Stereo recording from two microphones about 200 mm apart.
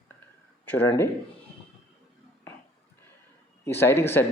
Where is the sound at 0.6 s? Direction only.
10° left (ahead or behind).